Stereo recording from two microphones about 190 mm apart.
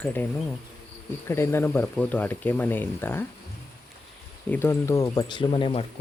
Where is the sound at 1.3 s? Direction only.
15° left (ahead or behind).